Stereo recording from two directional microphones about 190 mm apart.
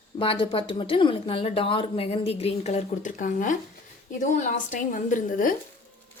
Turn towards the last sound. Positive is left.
turn(degrees=45)  # may be behind; listen again after turning